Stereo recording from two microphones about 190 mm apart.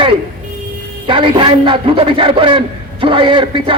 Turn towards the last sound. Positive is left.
turn(degrees=-25)  # may be behind; listen again after turning